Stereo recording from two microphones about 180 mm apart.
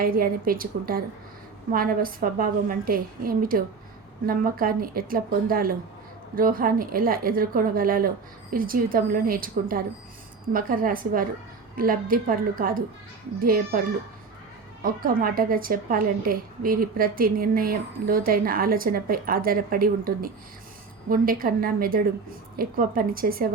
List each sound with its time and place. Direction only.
0.0 s a woman's voice: 55° right (ahead or behind)
15.0 s a woman's voice: 55° right (ahead or behind)